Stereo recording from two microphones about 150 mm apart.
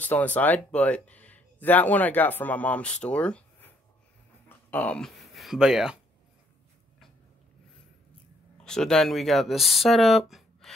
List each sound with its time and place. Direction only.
0.0 s speech: 10° left (ahead or behind)
8.6 s speech: 5° left (ahead or behind)